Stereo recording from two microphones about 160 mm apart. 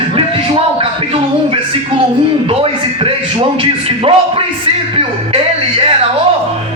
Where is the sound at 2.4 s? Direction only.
35° right (ahead or behind).